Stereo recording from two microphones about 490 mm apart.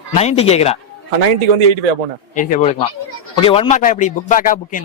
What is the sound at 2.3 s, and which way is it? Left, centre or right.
Speech, centre.